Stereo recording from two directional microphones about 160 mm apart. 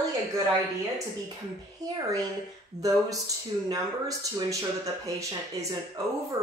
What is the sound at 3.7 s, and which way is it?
Speech, 20° right (ahead or behind).